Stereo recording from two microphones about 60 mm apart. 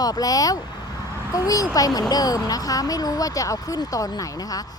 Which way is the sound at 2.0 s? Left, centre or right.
Left.